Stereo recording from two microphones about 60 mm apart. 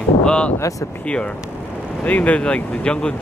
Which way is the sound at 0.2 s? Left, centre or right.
Centre.